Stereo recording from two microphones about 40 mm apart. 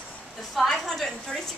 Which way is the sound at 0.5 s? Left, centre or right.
Centre.